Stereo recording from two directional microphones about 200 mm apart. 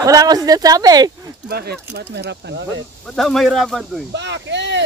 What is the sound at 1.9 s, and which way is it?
Speech, 60° right (ahead or behind).